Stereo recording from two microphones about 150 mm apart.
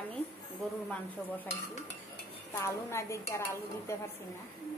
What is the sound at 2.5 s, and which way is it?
Speech, 20° left (ahead or behind).